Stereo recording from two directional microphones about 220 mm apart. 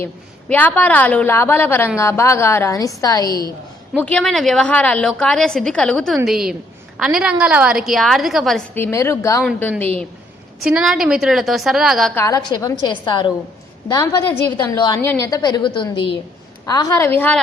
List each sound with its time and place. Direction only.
0.0 s a woman's voice: 10° left (ahead or behind)
3.9 s a woman's voice: 5° left (ahead or behind)
12.5 s a woman's voice: 20° left (ahead or behind)